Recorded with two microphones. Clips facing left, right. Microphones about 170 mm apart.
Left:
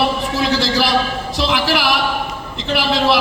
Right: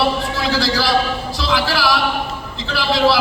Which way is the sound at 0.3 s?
20° left (ahead or behind).